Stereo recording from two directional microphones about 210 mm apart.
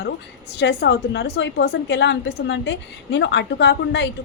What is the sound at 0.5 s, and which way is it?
A woman's voice, 55° left (ahead or behind).